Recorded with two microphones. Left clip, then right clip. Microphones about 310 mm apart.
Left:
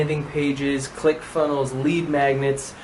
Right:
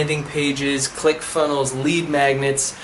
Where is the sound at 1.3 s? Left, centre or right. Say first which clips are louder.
Right 2 dB; left.